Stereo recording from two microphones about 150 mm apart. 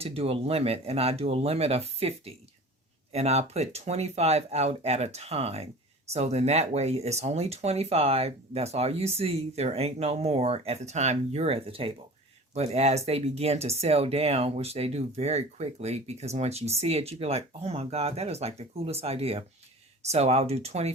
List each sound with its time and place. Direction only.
0.0 s speech: 40° right (ahead or behind)